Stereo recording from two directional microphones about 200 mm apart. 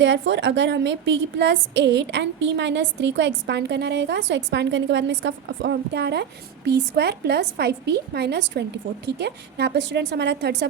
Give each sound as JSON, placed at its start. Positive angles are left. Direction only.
{"t": 0.0, "sound": "a woman's voice", "side_deg": -65}